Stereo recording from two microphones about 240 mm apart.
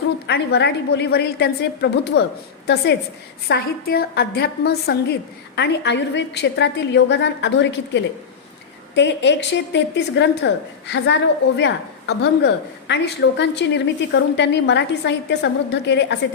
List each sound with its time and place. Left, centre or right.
0.3 s a woman's voice: left
3.5 s a woman's voice: left